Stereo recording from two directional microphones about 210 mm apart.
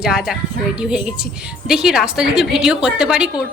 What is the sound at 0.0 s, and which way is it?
A woman's voice, 5° right (ahead or behind).